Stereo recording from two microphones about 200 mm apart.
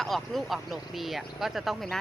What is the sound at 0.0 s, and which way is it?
Speech, centre (ahead or behind).